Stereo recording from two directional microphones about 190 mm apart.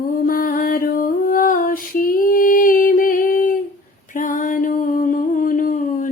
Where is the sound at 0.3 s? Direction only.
50° left (ahead or behind).